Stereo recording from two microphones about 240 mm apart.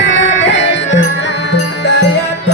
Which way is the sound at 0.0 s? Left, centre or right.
Left.